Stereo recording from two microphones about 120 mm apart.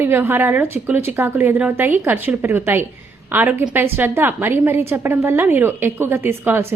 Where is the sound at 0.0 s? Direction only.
15° right (ahead or behind).